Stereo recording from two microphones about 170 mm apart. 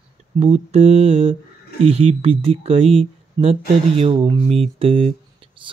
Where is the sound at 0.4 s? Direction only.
35° right (ahead or behind).